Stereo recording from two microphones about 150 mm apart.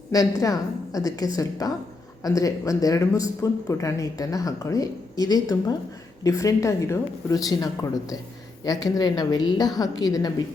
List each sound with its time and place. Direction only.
0.1 s speech: 25° left (ahead or behind)